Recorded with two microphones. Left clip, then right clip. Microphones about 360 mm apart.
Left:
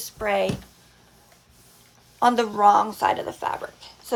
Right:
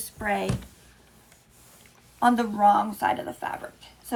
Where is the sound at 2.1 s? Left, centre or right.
Left.